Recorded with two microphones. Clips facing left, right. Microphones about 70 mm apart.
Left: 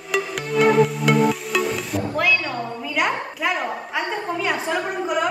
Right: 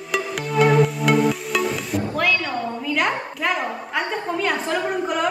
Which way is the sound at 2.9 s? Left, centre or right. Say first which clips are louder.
Left 2 dB; centre.